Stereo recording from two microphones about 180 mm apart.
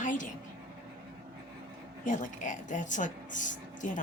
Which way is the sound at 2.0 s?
45° left (ahead or behind).